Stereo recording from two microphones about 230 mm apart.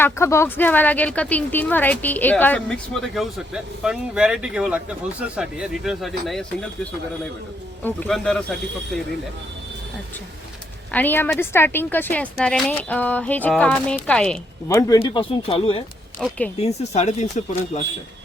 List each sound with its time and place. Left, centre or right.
0.0 s speech: centre
7.9 s speech: centre
10.9 s speech: centre; by 15.8 s left
16.2 s speech: centre
16.6 s speech: left